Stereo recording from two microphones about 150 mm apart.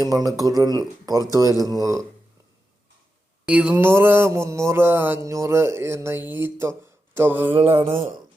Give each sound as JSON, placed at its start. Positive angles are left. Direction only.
{"t": 0.0, "sound": "speech", "side_deg": -25}
{"t": 3.4, "sound": "mantra", "side_deg": -10}
{"t": 7.5, "sound": "mantra", "side_deg": -40}